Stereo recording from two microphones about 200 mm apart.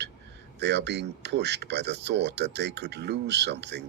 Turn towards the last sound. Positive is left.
turn(degrees=-60)  # may be behind; listen again after turning